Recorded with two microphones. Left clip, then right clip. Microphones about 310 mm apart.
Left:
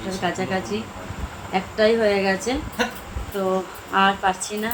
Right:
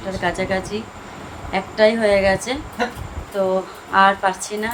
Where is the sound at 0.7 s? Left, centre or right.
Right.